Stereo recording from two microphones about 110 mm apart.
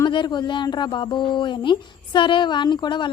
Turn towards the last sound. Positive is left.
turn(degrees=45)  # may be behind; listen again after turning